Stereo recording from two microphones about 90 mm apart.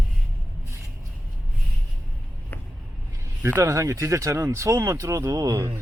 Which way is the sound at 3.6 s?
35° right (ahead or behind).